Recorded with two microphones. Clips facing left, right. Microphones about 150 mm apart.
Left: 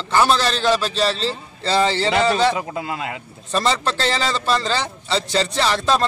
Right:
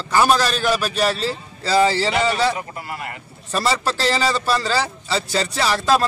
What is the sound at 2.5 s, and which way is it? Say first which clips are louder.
Speech: left 4 dB; 90° left.